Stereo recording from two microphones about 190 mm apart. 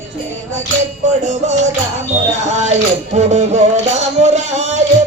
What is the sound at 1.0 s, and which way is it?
Music, 40° right (ahead or behind).